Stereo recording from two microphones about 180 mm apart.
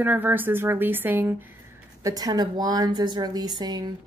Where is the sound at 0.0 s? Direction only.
10° right (ahead or behind).